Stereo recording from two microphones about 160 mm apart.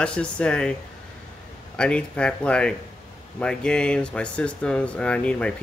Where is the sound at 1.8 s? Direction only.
5° left (ahead or behind).